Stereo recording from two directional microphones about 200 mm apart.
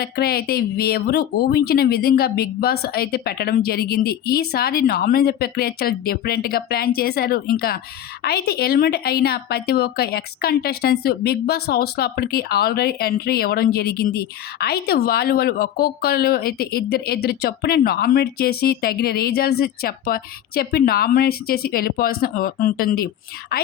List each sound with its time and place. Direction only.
0.0 s speech: 50° left (ahead or behind)